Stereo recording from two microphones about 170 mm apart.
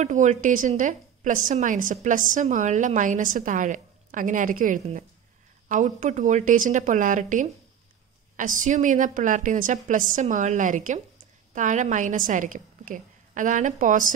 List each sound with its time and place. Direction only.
0.0 s a woman's voice: 45° right (ahead or behind)